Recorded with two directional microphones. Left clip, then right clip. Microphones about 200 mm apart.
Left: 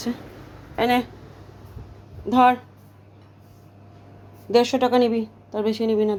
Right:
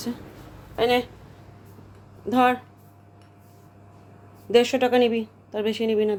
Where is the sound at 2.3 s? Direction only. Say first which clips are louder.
Left 4 dB; centre (ahead or behind).